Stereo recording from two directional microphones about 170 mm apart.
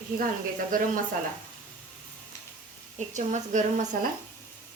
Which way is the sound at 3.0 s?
45° right (ahead or behind).